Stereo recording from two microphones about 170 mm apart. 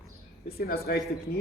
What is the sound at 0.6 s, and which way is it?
Speech, 65° left (ahead or behind).